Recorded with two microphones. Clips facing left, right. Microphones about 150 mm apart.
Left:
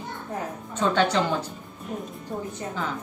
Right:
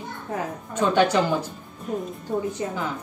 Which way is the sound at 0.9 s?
10° right (ahead or behind).